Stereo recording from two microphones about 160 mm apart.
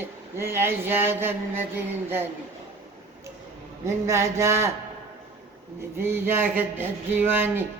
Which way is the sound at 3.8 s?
15° right (ahead or behind).